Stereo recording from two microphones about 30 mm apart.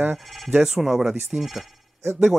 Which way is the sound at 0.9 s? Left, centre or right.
Right.